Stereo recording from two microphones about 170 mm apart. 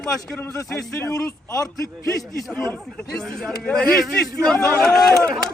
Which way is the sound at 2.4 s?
5° left (ahead or behind).